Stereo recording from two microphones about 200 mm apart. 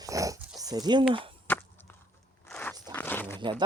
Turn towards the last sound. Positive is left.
turn(degrees=10)  # may be behind; listen again after turning